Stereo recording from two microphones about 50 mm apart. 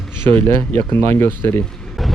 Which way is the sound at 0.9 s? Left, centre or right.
Left.